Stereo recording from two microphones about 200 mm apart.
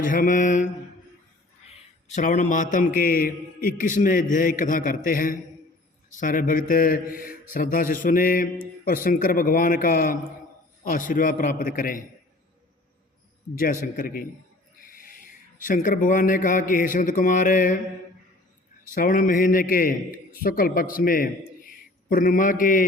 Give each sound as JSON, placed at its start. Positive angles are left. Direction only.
{"t": 0.0, "sound": "mantra", "side_deg": 40}
{"t": 2.0, "sound": "a man's voice", "side_deg": 35}
{"t": 13.8, "sound": "a man's voice", "side_deg": 45}
{"t": 18.9, "sound": "a man's voice", "side_deg": 45}